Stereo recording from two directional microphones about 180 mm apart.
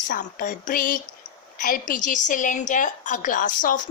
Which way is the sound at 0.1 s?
45° left (ahead or behind).